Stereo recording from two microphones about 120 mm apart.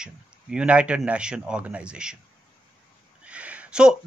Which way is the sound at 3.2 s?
10° right (ahead or behind).